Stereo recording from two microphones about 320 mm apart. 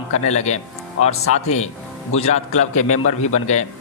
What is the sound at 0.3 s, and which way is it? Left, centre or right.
Speech, left.